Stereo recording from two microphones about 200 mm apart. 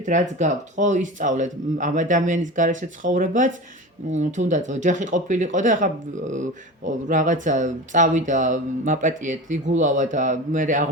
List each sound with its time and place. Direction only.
0.0 s speech: 35° right (ahead or behind)